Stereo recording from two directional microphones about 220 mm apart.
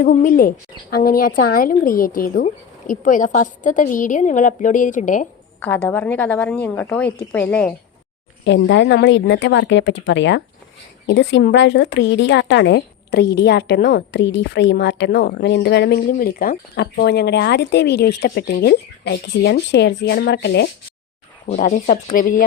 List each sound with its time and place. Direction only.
0.0 s speech: 40° left (ahead or behind)
5.6 s a woman's voice: 10° left (ahead or behind)
8.4 s a woman's voice: 55° left (ahead or behind)
16.0 s a woman's voice: 40° left (ahead or behind)
21.5 s speech: 40° left (ahead or behind)